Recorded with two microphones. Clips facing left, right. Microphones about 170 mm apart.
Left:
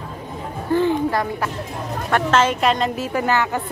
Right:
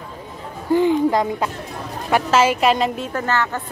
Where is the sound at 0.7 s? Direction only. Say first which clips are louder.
Right 3 dB; 15° right (ahead or behind).